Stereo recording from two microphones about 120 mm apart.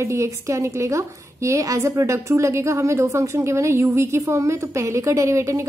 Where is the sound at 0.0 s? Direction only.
25° right (ahead or behind).